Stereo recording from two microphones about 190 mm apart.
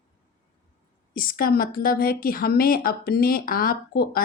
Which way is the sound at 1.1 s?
50° left (ahead or behind).